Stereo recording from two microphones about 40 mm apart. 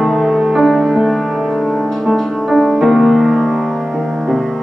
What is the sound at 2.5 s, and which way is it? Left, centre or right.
Music, centre.